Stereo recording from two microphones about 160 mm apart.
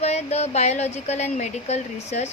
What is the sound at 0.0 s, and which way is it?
Speech, 40° left (ahead or behind).